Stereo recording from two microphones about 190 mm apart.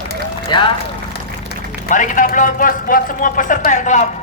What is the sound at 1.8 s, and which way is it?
A man's voice, 45° left (ahead or behind).